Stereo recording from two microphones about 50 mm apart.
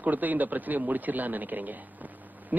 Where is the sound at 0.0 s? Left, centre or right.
Right.